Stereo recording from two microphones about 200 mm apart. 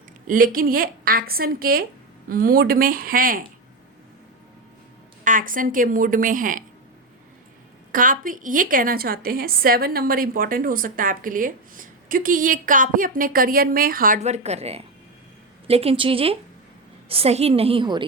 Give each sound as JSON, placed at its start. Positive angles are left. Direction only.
{"t": 0.3, "sound": "a woman's voice", "side_deg": -45}
{"t": 5.2, "sound": "a woman's voice", "side_deg": -40}
{"t": 7.9, "sound": "a woman's voice", "side_deg": -45}